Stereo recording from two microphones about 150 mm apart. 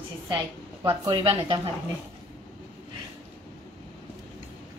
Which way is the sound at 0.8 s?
30° right (ahead or behind).